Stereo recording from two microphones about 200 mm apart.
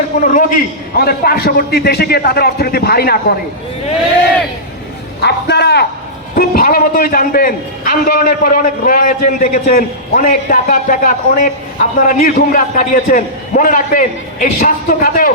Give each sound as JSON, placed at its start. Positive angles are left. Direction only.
{"t": 0.3, "sound": "a man's voice", "side_deg": 45}
{"t": 5.2, "sound": "a sound", "side_deg": 55}
{"t": 6.3, "sound": "a man's voice", "side_deg": 45}